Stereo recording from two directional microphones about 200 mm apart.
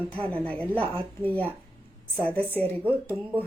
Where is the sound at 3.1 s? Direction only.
10° right (ahead or behind).